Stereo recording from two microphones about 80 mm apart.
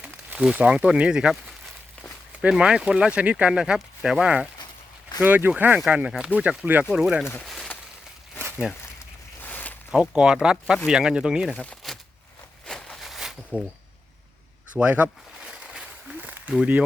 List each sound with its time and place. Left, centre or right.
0.0 s speech: centre
5.2 s speech: right; by 7.3 s centre
7.4 s a sound: centre
8.6 s speech: centre
9.4 s zipper: left
9.9 s speech: centre
11.5 s speech: centre
12.6 s a sound: centre
13.5 s speech: centre
14.8 s a sound: centre